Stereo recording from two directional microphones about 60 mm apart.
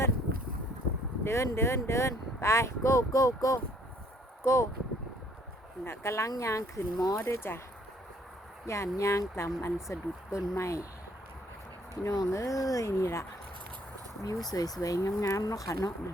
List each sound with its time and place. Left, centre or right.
1.2 s speech: left
4.4 s speech: left
5.8 s speech: left
6.3 s speech: left
7.2 s speech: left
8.6 s speech: left
12.0 s speech: left
14.2 s speech: left
14.5 s speech: left